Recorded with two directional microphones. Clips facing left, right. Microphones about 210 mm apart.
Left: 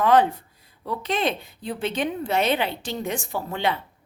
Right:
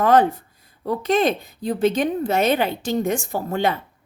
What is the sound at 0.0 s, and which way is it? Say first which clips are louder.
A woman's voice: right 2 dB; 45° right (ahead or behind).